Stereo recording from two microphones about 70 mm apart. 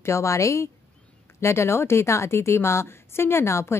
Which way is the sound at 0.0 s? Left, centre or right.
Left.